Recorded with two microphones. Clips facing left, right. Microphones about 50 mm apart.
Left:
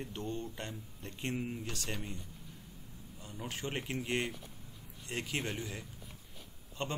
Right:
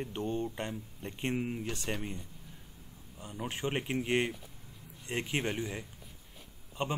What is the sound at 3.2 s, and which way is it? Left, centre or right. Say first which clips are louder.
A man's voice: right 5 dB; right.